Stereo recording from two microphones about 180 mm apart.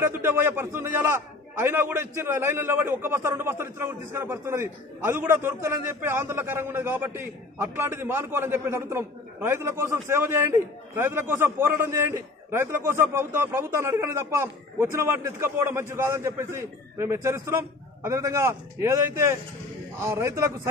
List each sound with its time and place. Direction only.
0.0 s a man's voice: 10° right (ahead or behind)
20.0 s a man's voice: 15° right (ahead or behind)